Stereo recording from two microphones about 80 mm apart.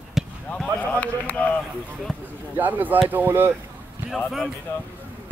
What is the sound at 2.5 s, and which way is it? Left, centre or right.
Speech, right.